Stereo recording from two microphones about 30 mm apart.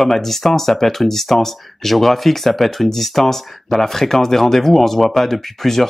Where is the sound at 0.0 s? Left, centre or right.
Centre.